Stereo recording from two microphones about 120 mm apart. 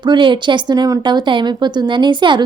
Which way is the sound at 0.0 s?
40° right (ahead or behind).